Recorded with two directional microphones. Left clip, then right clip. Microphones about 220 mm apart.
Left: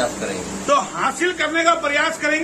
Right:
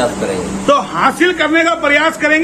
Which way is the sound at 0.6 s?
35° right (ahead or behind).